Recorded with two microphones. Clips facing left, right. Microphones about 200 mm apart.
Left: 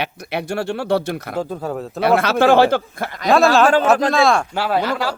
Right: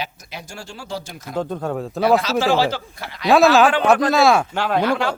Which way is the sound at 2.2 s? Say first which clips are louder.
Left 5 dB; 60° left (ahead or behind).